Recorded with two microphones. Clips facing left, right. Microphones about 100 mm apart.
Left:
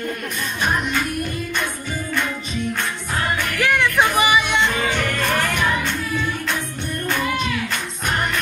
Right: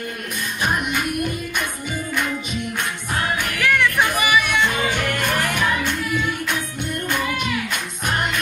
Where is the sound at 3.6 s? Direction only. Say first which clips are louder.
Left 1 dB; 20° left (ahead or behind).